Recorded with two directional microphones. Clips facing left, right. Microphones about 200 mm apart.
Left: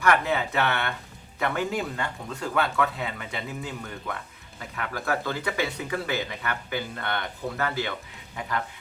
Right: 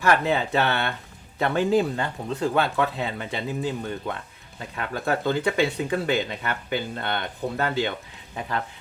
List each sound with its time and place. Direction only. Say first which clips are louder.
0.0 s speech: right 2 dB; 30° right (ahead or behind)